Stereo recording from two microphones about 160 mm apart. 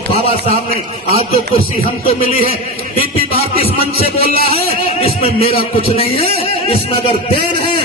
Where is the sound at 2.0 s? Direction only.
35° left (ahead or behind).